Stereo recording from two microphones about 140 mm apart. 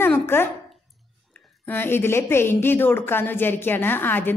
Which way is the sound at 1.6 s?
15° left (ahead or behind).